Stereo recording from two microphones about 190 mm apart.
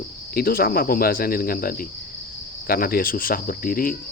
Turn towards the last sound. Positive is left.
turn(degrees=50)  # may be behind; listen again after turning